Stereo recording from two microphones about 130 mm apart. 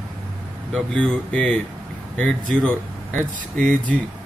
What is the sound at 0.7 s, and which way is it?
Speech, 5° left (ahead or behind).